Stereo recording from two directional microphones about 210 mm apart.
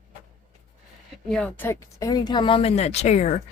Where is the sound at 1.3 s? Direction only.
5° left (ahead or behind); by 3.4 s 35° left (ahead or behind).